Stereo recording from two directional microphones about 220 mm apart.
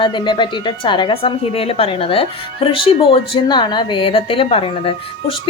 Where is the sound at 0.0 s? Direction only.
20° left (ahead or behind).